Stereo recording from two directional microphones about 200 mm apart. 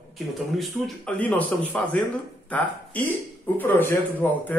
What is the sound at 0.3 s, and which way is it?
Speech, centre (ahead or behind).